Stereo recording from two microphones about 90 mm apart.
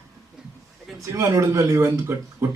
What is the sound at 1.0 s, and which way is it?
Speech, 40° right (ahead or behind).